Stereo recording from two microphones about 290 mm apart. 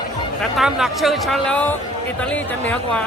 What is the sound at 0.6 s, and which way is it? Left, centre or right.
Speech, centre.